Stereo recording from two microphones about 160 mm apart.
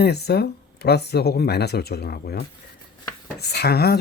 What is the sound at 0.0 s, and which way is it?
Speech, 90° left.